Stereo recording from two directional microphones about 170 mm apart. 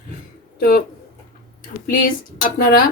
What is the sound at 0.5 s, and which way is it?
Speech, 60° left (ahead or behind).